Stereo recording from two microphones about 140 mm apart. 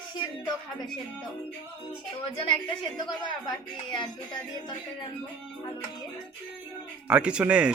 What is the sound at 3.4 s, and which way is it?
Speech, 30° left (ahead or behind).